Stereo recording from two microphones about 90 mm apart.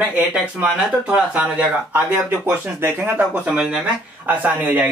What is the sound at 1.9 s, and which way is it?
Speech, 25° right (ahead or behind).